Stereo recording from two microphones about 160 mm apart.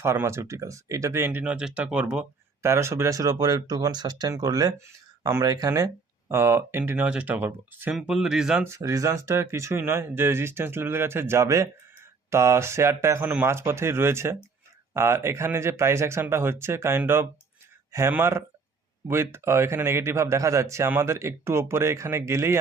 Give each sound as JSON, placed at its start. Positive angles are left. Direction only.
{"t": 0.0, "sound": "speech", "side_deg": -15}
{"t": 8.6, "sound": "speech", "side_deg": -20}